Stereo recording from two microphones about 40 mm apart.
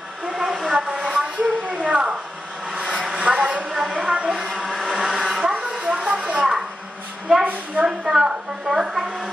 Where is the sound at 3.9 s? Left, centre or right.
Centre.